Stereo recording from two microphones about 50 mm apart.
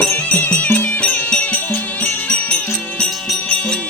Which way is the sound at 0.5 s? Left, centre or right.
Left.